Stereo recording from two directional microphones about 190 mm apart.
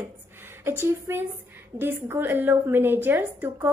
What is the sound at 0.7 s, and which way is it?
A woman's voice, 15° right (ahead or behind).